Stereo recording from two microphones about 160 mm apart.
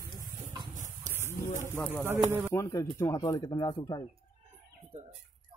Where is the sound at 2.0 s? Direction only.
15° right (ahead or behind).